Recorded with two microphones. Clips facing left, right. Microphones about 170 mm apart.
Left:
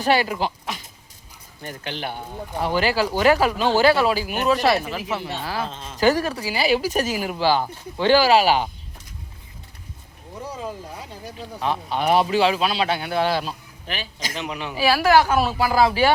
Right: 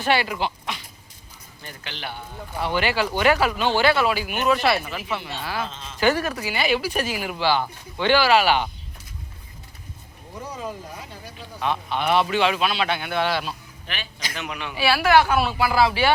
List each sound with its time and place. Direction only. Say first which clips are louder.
0.0 s a man's voice: left 2 dB; 40° left (ahead or behind)
1.6 s a man's voice: left 6 dB; 45° left (ahead or behind)
11.3 s a man's voice: left 1 dB; 35° left (ahead or behind)